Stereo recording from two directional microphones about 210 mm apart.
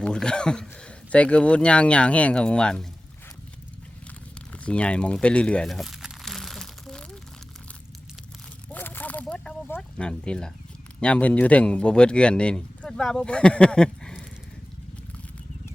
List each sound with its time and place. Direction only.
0.0 s speech: 5° left (ahead or behind)
4.5 s crumpling: 5° left (ahead or behind)
8.7 s a sound: 10° left (ahead or behind)
11.0 s speech: 5° left (ahead or behind)